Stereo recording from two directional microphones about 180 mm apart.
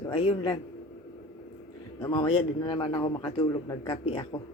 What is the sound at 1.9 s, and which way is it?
A man's voice, 30° left (ahead or behind).